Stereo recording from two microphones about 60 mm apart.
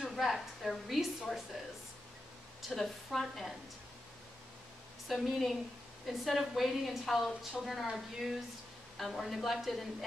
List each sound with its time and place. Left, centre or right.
0.1 s a woman's voice: centre
2.7 s a woman's voice: centre
5.0 s a woman's voice: centre